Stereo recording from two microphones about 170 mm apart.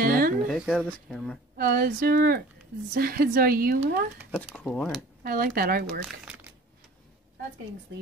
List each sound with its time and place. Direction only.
0.0 s music: 60° right (ahead or behind)
0.5 s speech: centre (ahead or behind)
1.6 s speech: 65° right (ahead or behind)
4.3 s speech: centre (ahead or behind)
5.2 s speech: 55° right (ahead or behind)